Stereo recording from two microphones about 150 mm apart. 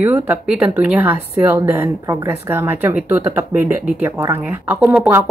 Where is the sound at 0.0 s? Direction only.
10° right (ahead or behind).